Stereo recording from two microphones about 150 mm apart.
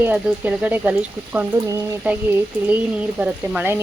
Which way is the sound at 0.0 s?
10° right (ahead or behind).